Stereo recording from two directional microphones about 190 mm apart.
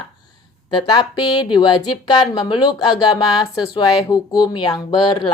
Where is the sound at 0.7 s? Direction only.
20° left (ahead or behind).